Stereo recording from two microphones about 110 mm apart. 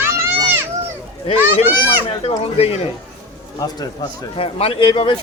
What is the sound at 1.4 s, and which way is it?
Speech, 20° right (ahead or behind).